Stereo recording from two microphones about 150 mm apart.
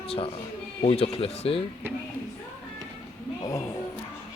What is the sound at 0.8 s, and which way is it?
Speech, 40° left (ahead or behind).